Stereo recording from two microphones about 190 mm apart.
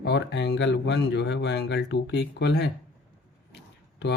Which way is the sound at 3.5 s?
65° left (ahead or behind).